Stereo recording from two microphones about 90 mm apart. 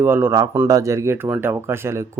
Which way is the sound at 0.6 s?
40° right (ahead or behind).